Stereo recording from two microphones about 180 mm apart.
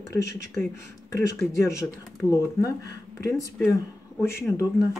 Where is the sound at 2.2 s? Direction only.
10° right (ahead or behind).